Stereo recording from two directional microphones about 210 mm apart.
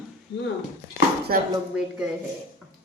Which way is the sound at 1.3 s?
45° right (ahead or behind).